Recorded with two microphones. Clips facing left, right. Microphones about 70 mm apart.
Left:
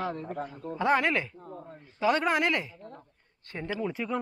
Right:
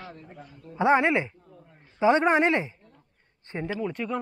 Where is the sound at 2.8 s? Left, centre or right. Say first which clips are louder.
Left 11 dB; left.